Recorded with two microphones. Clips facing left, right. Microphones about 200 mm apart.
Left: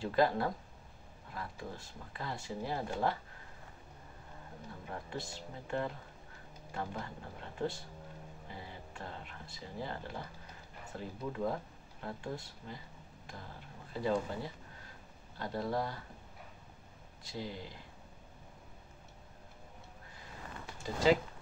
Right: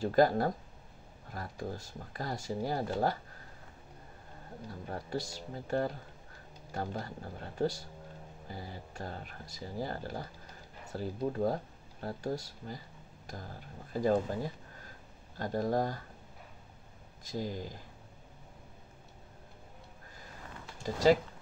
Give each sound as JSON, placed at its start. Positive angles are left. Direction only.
{"t": 0.0, "sound": "speech", "side_deg": -40}
{"t": 4.8, "sound": "speech", "side_deg": -40}
{"t": 17.3, "sound": "speech", "side_deg": -45}